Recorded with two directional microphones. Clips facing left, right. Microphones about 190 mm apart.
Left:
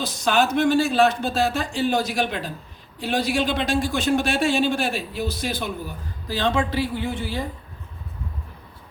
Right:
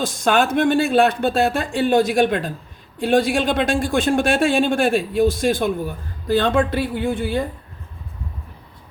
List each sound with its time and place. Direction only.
0.0 s speech: 50° right (ahead or behind)